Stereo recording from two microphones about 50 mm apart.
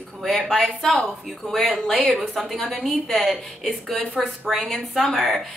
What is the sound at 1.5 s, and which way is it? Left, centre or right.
Speech, centre.